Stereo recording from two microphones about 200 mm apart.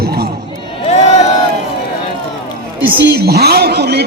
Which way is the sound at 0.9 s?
35° left (ahead or behind).